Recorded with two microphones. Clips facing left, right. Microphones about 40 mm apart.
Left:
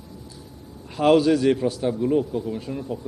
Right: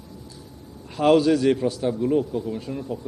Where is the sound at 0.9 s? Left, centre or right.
Centre.